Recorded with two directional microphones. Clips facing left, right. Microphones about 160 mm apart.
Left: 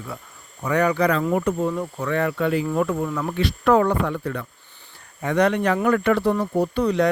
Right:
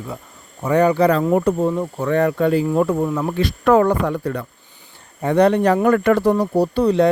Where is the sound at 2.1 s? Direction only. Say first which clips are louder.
Right 5 dB; 40° right (ahead or behind).